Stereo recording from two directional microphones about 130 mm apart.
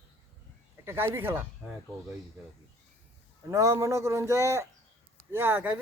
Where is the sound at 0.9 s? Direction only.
15° right (ahead or behind).